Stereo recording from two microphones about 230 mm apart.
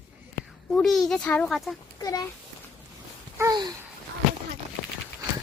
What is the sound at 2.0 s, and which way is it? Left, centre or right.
Speech, centre.